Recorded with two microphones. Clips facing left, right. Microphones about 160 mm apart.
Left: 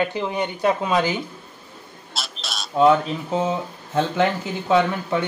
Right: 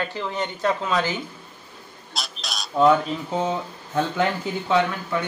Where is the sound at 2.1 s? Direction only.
Centre (ahead or behind).